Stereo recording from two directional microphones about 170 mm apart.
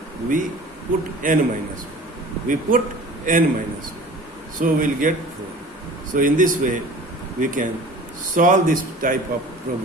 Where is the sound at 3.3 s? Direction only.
50° right (ahead or behind).